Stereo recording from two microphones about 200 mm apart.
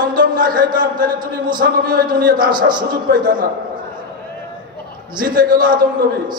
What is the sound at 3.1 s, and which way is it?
Speech, 55° right (ahead or behind).